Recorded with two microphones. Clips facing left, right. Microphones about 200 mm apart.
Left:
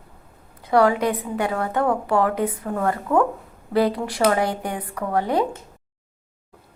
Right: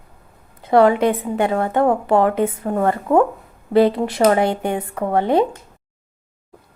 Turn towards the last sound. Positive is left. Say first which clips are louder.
# right 5 dB
turn(degrees=-25)  # may be behind; listen again after turning